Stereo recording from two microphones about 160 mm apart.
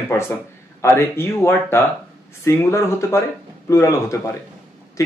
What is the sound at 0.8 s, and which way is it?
Speech, 15° left (ahead or behind).